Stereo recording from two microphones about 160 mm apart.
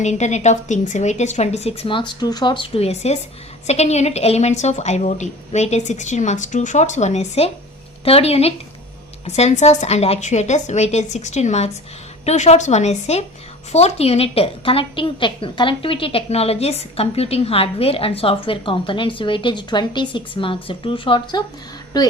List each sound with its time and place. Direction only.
0.0 s a woman's voice: 45° left (ahead or behind)